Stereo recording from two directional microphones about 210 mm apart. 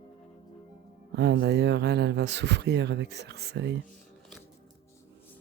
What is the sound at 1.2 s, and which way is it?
Speech, 55° right (ahead or behind).